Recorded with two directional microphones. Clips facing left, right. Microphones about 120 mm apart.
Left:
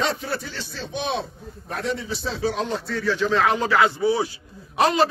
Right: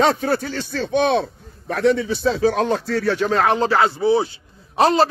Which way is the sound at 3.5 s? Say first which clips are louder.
Right 2 dB; 30° right (ahead or behind).